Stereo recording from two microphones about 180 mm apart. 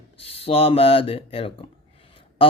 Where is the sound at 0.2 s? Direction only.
35° left (ahead or behind).